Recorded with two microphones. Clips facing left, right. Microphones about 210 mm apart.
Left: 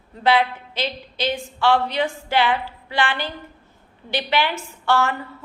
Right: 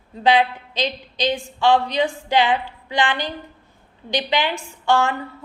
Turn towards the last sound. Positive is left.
turn(degrees=-15)  # may be behind; listen again after turning